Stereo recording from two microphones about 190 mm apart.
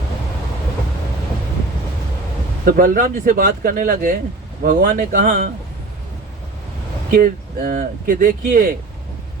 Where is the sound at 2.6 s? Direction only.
45° right (ahead or behind).